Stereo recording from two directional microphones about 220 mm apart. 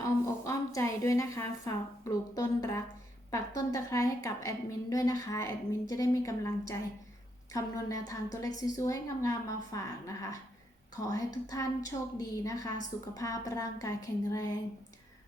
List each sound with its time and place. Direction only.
0.0 s a woman's voice: 15° left (ahead or behind)